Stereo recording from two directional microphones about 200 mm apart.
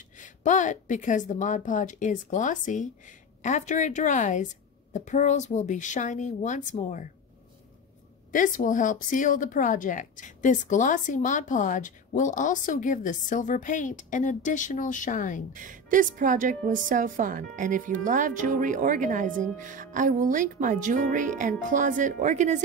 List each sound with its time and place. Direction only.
0.2 s a woman's voice: 40° left (ahead or behind)
8.3 s a woman's voice: 40° left (ahead or behind)
15.5 s a woman's voice: 40° right (ahead or behind)